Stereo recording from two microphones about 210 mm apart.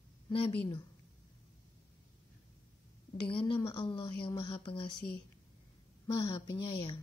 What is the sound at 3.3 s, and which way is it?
A woman's voice, 25° left (ahead or behind).